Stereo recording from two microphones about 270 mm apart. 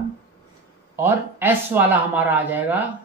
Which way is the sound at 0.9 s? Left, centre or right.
Centre.